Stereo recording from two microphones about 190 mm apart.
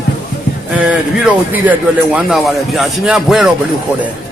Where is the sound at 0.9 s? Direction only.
5° right (ahead or behind).